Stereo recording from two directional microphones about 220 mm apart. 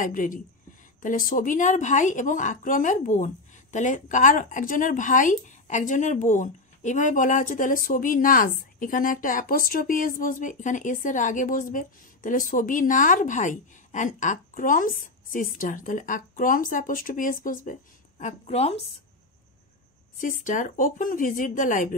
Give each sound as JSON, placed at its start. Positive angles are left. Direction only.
{"t": 0.0, "sound": "speech", "side_deg": 35}
{"t": 18.2, "sound": "speech", "side_deg": 30}
{"t": 20.2, "sound": "speech", "side_deg": 35}